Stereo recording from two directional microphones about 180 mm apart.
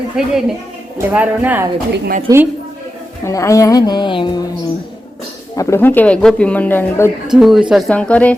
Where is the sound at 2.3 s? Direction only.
20° right (ahead or behind).